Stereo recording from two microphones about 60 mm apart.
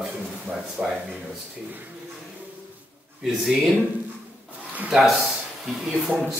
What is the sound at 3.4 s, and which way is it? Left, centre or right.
Speech, centre.